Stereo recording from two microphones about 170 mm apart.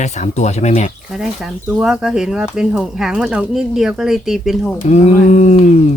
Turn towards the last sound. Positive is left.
turn(degrees=40)  # may be behind; listen again after turning